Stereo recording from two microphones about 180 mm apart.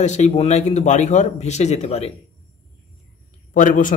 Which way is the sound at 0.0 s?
40° left (ahead or behind).